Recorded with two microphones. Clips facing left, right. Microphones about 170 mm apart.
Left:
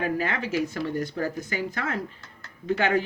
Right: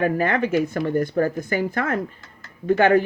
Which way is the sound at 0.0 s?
55° right (ahead or behind).